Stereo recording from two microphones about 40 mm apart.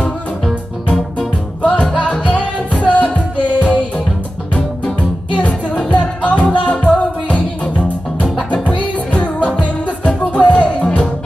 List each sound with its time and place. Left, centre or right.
1.6 s music: left
5.4 s music: left